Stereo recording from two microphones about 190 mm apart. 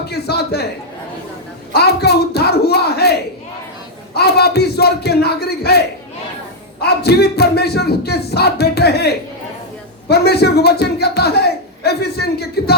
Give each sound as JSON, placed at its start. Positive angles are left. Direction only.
{"t": 0.1, "sound": "a sound", "side_deg": 60}
{"t": 1.7, "sound": "a man's voice", "side_deg": 60}
{"t": 6.8, "sound": "a man's voice", "side_deg": 60}